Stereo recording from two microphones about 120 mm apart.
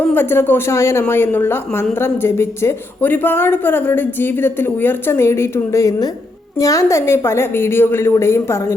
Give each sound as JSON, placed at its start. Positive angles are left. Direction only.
{"t": 0.0, "sound": "a woman's voice", "side_deg": 15}